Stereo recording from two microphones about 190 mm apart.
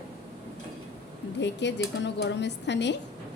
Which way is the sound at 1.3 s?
70° left (ahead or behind).